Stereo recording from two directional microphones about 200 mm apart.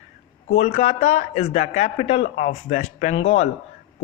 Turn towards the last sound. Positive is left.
turn(degrees=30)  # may be behind; listen again after turning